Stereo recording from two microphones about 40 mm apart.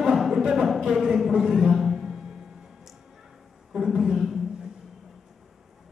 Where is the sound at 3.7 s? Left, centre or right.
Centre.